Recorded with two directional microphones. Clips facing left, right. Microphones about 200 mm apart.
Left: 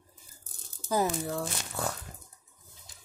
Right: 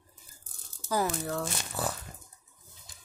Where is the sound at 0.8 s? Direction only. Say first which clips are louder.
Left 1 dB; 20° left (ahead or behind).